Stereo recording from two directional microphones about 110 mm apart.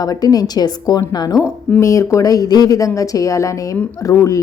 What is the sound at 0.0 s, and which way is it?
Speech, 35° left (ahead or behind).